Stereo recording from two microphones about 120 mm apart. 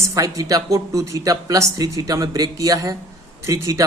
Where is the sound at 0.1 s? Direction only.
30° right (ahead or behind).